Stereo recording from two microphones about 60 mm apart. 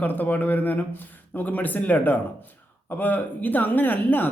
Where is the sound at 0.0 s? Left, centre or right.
Left.